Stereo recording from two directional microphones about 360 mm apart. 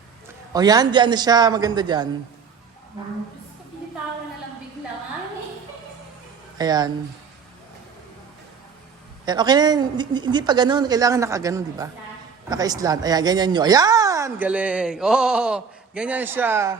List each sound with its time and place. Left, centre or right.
0.5 s speech: centre
6.6 s speech: centre
9.2 s speech: centre